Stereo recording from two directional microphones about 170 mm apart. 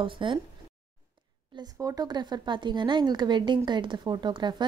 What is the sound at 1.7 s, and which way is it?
A woman's voice, 20° right (ahead or behind).